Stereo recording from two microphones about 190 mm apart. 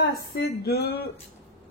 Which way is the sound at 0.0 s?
55° left (ahead or behind).